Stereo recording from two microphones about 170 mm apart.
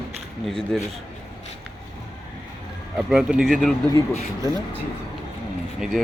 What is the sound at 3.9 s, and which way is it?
Speech, 20° left (ahead or behind).